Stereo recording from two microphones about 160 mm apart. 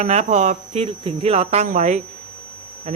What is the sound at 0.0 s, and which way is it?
Speech, 45° right (ahead or behind).